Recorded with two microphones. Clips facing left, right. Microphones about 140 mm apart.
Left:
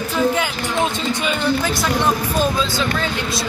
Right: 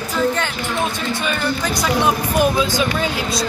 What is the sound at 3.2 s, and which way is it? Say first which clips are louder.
Speech: right 2 dB; centre (ahead or behind).